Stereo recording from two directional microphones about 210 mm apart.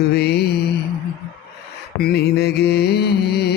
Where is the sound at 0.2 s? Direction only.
50° left (ahead or behind).